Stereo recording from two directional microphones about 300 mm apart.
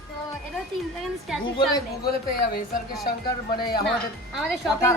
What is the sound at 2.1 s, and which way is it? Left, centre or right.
Speech, left.